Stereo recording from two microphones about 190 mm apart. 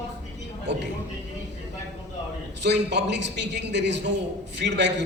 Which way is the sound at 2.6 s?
65° right (ahead or behind).